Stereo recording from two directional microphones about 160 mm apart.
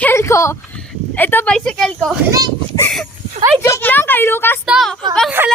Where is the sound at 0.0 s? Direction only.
15° left (ahead or behind).